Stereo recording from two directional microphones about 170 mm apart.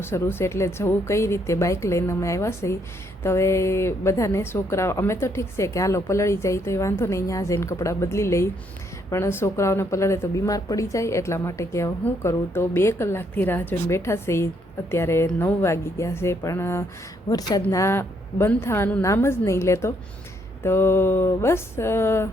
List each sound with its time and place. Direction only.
0.0 s speech: 15° left (ahead or behind)